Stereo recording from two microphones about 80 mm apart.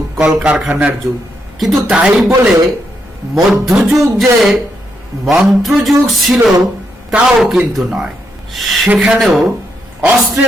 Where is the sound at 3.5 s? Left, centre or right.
Centre.